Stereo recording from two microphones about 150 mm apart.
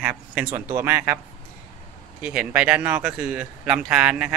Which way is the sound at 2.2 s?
10° right (ahead or behind).